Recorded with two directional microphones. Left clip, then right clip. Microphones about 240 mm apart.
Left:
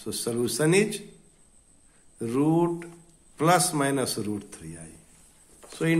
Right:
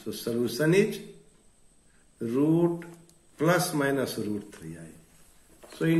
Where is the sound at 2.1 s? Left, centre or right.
Left.